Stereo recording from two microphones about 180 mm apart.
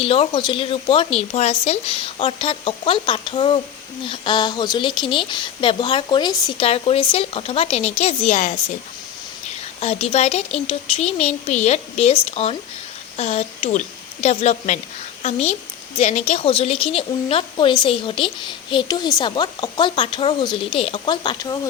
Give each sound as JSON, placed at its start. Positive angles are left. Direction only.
{"t": 0.0, "sound": "a woman's voice", "side_deg": 30}
{"t": 9.8, "sound": "a woman's voice", "side_deg": 35}